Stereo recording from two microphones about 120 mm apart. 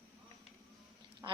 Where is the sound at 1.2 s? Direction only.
30° right (ahead or behind).